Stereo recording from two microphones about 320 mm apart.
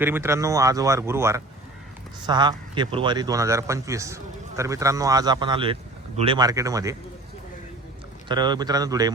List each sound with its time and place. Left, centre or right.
0.0 s speech: centre
8.3 s speech: centre